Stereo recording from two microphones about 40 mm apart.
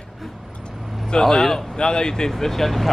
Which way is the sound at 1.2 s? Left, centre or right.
Centre.